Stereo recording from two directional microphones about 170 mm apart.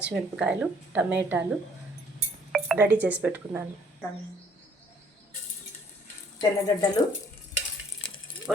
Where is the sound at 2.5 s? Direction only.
5° right (ahead or behind).